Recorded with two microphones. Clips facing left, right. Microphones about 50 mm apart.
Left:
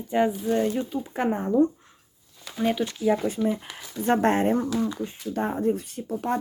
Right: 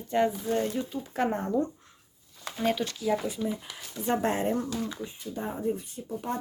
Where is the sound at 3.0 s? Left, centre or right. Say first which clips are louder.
Left 5 dB; left.